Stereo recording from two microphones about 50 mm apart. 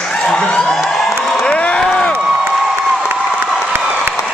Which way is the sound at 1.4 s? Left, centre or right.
Left.